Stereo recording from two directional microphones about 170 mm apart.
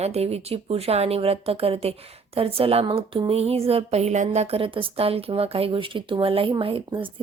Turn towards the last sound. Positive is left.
turn(degrees=-30)  # may be behind; listen again after turning